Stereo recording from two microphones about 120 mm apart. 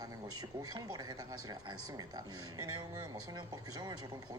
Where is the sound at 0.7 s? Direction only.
35° right (ahead or behind).